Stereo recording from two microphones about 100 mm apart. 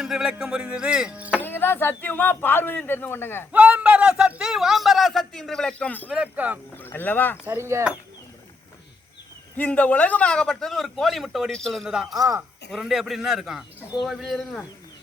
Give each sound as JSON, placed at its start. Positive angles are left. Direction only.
{"t": 0.0, "sound": "speech", "side_deg": -5}
{"t": 1.4, "sound": "speech", "side_deg": 20}
{"t": 3.5, "sound": "a man's voice", "side_deg": -15}
{"t": 6.1, "sound": "speech", "side_deg": -15}
{"t": 6.8, "sound": "speech", "side_deg": 20}
{"t": 7.4, "sound": "a sound", "side_deg": -25}
{"t": 9.6, "sound": "a man's voice", "side_deg": 15}
{"t": 12.1, "sound": "speech", "side_deg": -35}
{"t": 12.7, "sound": "a man's voice", "side_deg": -5}